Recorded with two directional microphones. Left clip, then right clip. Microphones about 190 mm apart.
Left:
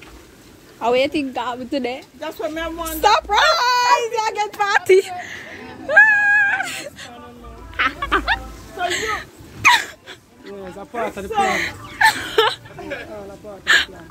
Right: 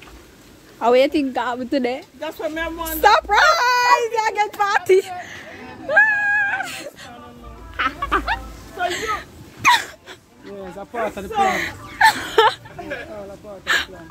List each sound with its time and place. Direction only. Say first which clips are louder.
0.7 s a woman's voice: right 2 dB; 45° right (ahead or behind)
2.1 s speech: even; 20° right (ahead or behind)
3.0 s speech: right 1 dB; 40° right (ahead or behind)
4.6 s a sound: left 3 dB; 10° right (ahead or behind)
7.7 s music: left 2 dB; 5° right (ahead or behind)
10.8 s a woman's voice: even; 50° right (ahead or behind)
11.4 s whimper: even; 20° right (ahead or behind)